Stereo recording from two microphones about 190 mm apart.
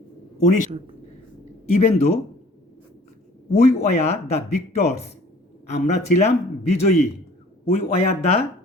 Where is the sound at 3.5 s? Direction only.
35° left (ahead or behind).